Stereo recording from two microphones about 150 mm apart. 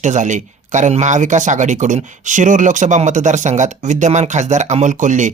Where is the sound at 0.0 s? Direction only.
55° right (ahead or behind).